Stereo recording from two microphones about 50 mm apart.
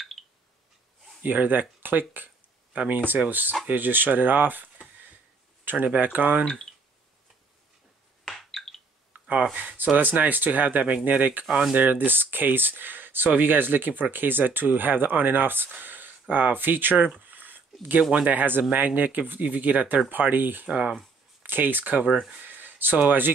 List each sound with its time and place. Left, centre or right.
1.2 s speech: right
5.9 s speech: right
8.3 s a sound: centre
9.4 s speech: right
15.8 s a sound: right
18.1 s speech: right
20.6 s speech: right
21.4 s speech: right
22.1 s speech: centre
22.4 s a sound: right
22.9 s speech: right